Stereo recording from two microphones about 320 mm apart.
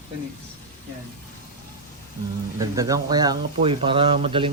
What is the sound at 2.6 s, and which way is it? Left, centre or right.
A man's voice, centre.